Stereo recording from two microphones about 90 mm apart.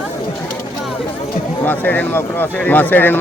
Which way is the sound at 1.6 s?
20° left (ahead or behind).